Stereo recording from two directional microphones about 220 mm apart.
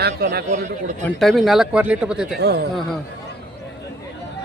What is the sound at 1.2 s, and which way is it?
Speech, centre (ahead or behind).